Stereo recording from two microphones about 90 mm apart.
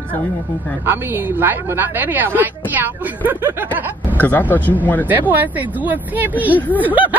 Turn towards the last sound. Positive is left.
turn(degrees=-20)  # may be behind; listen again after turning